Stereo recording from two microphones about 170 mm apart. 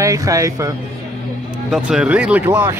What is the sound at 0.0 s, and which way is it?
Speech, 20° right (ahead or behind).